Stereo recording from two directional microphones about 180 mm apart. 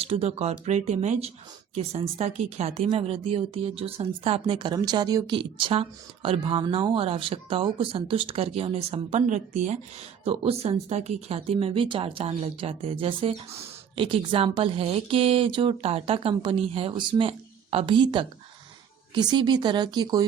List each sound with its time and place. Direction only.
0.0 s speech: 35° right (ahead or behind)